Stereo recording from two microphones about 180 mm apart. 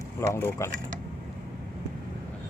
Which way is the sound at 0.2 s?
15° left (ahead or behind).